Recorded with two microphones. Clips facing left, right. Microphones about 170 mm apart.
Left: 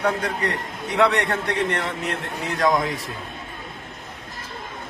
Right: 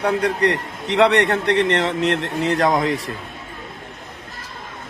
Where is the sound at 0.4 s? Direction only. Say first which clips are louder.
Right 6 dB; 70° right (ahead or behind).